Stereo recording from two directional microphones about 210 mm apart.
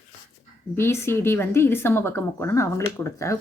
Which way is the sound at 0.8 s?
10° left (ahead or behind).